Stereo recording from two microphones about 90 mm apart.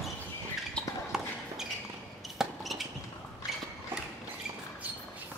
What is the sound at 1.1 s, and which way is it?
Basketball bounce, 5° right (ahead or behind).